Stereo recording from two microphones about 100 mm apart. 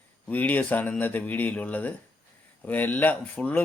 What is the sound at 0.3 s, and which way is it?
Speech, 15° left (ahead or behind).